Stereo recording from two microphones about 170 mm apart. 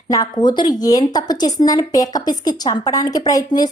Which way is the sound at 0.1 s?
25° left (ahead or behind).